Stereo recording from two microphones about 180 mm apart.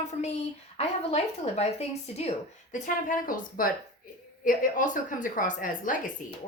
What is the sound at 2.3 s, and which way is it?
A woman's voice, 45° left (ahead or behind).